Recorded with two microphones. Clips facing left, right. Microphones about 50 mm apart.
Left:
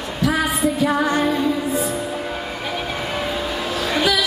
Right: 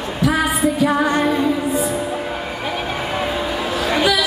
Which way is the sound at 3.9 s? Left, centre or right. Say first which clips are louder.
Right 2 dB; centre.